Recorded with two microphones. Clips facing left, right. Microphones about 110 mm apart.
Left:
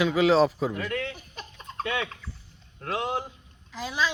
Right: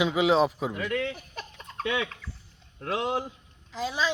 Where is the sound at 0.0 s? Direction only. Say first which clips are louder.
Left 2 dB; 15° right (ahead or behind).